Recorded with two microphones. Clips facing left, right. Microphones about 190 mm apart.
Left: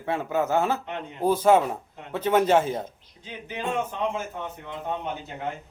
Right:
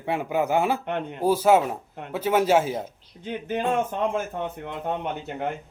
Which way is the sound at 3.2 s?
55° right (ahead or behind).